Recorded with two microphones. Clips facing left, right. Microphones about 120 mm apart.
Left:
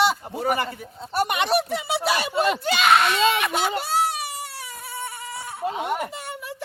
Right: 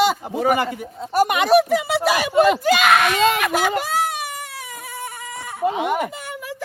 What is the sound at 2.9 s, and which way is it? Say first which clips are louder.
Speech: right 1 dB; 55° right (ahead or behind).